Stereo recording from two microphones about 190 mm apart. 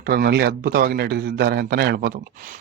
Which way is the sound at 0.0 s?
50° right (ahead or behind).